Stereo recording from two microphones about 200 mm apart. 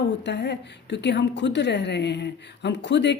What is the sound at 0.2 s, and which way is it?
A woman's voice, 60° left (ahead or behind).